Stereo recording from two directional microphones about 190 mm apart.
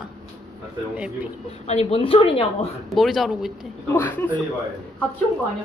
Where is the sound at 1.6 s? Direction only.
30° left (ahead or behind).